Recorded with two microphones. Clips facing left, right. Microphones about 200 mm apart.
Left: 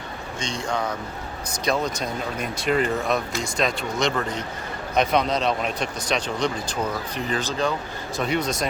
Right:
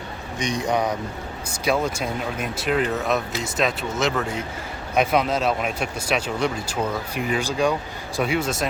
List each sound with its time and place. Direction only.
0.3 s speech: 15° right (ahead or behind)
1.6 s speech: 5° right (ahead or behind)